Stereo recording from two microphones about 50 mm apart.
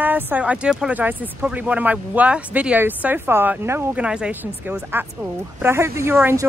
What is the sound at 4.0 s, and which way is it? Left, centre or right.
Speech, centre.